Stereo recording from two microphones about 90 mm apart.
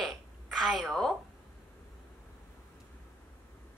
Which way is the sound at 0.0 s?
Centre (ahead or behind).